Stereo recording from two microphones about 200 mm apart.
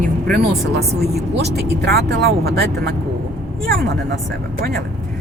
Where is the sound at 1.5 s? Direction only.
55° right (ahead or behind).